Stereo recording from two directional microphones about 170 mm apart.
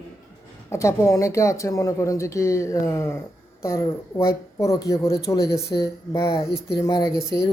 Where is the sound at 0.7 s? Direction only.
15° left (ahead or behind).